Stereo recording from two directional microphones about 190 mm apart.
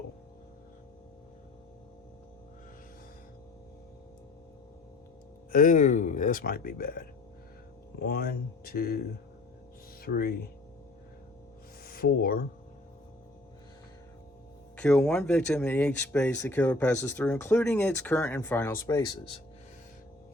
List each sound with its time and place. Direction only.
5.5 s speech: 45° left (ahead or behind)
7.9 s speech: 55° left (ahead or behind)
10.0 s speech: 50° left (ahead or behind)
11.9 s speech: 50° left (ahead or behind)
14.8 s speech: 5° left (ahead or behind)